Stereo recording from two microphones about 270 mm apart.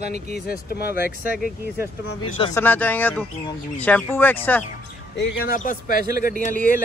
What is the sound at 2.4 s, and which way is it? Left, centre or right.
Speech, centre.